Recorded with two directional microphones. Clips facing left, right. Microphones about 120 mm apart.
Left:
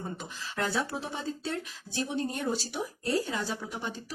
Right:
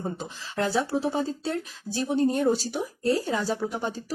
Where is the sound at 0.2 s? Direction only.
30° right (ahead or behind).